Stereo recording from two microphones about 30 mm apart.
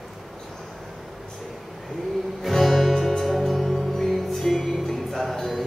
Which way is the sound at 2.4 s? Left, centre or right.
Centre.